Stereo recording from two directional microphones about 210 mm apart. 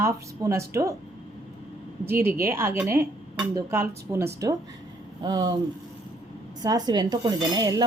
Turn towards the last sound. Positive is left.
turn(degrees=-20)  # may be behind; listen again after turning